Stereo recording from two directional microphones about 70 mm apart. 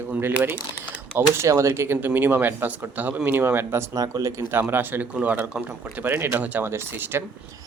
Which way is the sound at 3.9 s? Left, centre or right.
Right.